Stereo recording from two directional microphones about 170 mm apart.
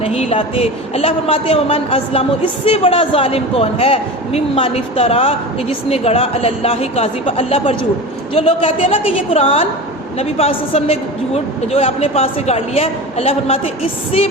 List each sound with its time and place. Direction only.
0.0 s a woman's voice: 35° left (ahead or behind)